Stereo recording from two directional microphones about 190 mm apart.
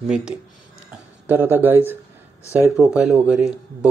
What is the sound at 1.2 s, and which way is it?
A man's voice, 10° right (ahead or behind).